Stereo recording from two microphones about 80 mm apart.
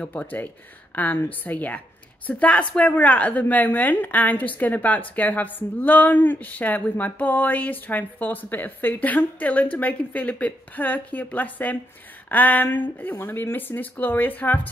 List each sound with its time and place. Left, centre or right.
0.0 s a woman's voice: centre